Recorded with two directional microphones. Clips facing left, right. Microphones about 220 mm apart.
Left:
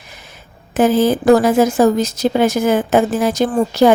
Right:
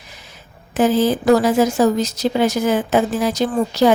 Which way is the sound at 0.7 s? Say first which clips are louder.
Left 2 dB; 55° left (ahead or behind).